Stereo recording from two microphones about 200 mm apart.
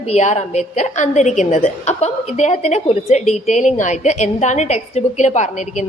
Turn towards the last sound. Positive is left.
turn(degrees=35)  # may be behind; listen again after turning